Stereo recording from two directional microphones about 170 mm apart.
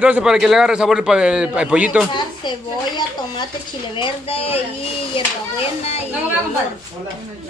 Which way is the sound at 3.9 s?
30° left (ahead or behind).